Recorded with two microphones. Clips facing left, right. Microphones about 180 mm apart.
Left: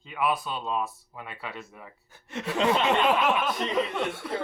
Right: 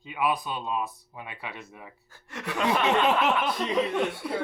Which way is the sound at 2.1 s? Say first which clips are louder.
Left 3 dB; 20° left (ahead or behind).